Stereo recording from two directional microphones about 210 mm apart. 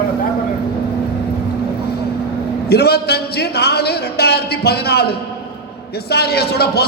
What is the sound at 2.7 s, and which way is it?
A man's voice, 50° left (ahead or behind).